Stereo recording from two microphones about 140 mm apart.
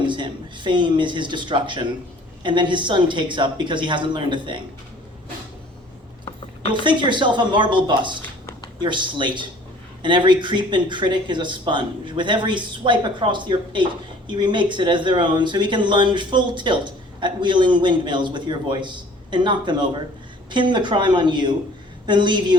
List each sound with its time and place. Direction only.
0.0 s speech: 35° right (ahead or behind)
6.2 s a sound: 40° left (ahead or behind)
6.8 s speech: 35° right (ahead or behind)